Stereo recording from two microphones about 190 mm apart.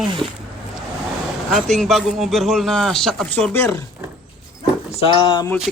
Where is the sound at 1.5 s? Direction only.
Centre (ahead or behind).